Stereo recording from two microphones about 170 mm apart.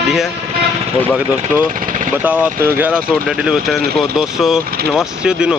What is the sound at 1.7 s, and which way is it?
Speech, 55° right (ahead or behind).